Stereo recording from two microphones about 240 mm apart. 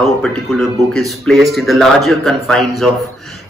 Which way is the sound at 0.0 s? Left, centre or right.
Centre.